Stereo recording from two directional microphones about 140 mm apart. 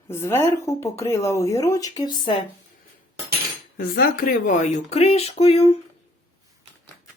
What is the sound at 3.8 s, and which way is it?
Speech, 85° left.